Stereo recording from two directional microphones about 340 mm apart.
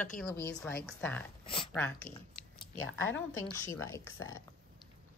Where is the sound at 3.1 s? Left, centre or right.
Left.